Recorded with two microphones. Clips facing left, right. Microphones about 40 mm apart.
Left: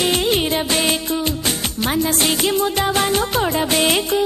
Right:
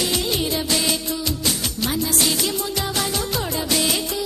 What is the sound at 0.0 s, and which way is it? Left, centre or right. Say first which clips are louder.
Music: left 5 dB; left.